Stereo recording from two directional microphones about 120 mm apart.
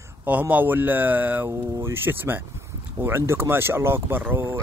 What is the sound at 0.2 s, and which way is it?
Speech, 15° right (ahead or behind).